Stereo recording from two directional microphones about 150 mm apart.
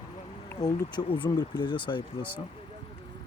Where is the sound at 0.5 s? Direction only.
30° left (ahead or behind).